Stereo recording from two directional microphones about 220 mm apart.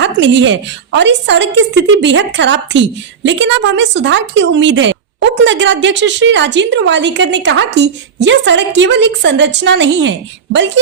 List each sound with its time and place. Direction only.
0.0 s a woman's voice: 55° right (ahead or behind)